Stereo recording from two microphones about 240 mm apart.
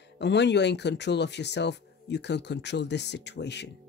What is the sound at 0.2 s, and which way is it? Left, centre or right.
Speech, left.